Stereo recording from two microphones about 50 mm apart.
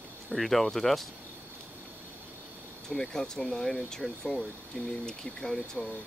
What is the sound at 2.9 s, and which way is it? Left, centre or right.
Speech, centre.